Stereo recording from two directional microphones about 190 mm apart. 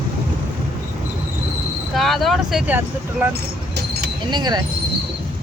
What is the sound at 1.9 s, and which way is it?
Speech, centre (ahead or behind).